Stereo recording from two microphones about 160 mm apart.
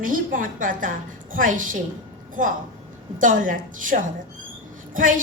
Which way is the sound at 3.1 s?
55° right (ahead or behind).